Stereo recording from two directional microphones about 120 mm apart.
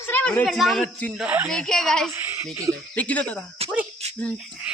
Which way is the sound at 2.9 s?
10° left (ahead or behind).